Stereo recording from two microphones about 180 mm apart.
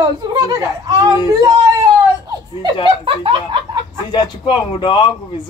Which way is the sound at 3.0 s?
30° right (ahead or behind).